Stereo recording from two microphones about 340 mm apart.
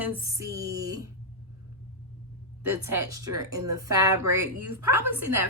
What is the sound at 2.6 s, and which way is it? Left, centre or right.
Speech, right.